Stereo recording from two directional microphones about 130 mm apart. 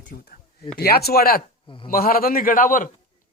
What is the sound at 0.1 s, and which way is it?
Speech, 90° left.